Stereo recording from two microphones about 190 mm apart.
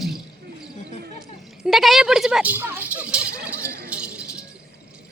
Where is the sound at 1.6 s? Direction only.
Centre (ahead or behind).